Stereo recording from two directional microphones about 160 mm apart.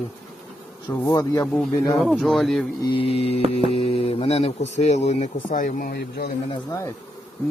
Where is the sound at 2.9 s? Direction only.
35° left (ahead or behind); by 6.3 s 75° left (ahead or behind).